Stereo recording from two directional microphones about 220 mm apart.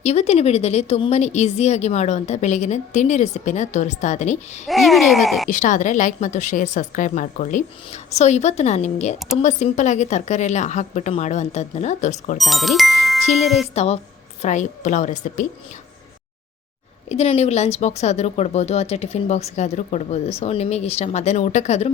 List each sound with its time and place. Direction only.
0.0 s a woman's voice: 30° left (ahead or behind)
4.6 s speech: centre (ahead or behind)
5.5 s a woman's voice: 35° left (ahead or behind)
12.4 s speech: centre (ahead or behind)
13.7 s a woman's voice: 30° left (ahead or behind)
17.1 s speech: 30° left (ahead or behind)